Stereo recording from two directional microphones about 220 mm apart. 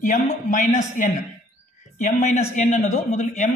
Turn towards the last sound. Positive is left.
turn(degrees=35)  # may be behind; listen again after turning